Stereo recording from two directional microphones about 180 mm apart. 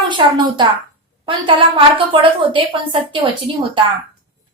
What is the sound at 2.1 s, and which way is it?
A woman's voice, 30° right (ahead or behind).